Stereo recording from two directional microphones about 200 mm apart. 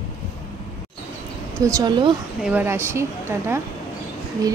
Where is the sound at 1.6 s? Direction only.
20° right (ahead or behind).